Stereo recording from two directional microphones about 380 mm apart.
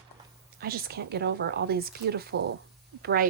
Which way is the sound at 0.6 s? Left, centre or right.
Right.